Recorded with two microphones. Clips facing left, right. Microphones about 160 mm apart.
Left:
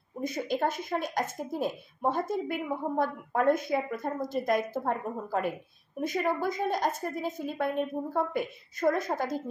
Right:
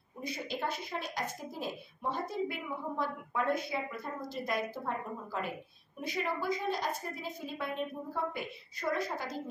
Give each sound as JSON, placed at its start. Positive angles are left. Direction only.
{"t": 0.2, "sound": "speech", "side_deg": 50}